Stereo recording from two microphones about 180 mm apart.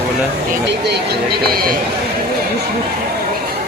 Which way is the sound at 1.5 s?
55° right (ahead or behind).